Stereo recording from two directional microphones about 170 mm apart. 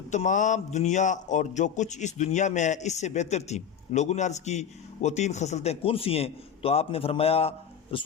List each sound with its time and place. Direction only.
0.1 s a man's voice: 45° left (ahead or behind)